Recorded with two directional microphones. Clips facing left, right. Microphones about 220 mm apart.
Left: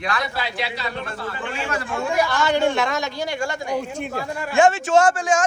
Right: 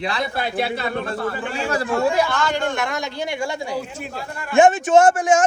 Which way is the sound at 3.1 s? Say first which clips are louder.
Right 1 dB; 20° right (ahead or behind).